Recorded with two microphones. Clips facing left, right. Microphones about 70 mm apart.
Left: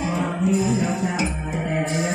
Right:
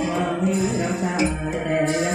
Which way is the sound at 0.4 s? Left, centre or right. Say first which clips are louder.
Left 1 dB; right.